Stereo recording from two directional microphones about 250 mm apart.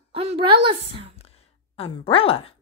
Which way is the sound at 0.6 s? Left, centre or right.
Right.